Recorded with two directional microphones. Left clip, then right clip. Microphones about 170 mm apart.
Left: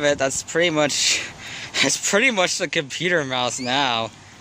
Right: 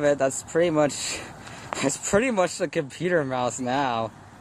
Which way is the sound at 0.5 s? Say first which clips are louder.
Left 3 dB; 10° left (ahead or behind).